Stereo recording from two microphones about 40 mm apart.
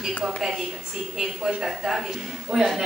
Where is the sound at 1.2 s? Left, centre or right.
Right.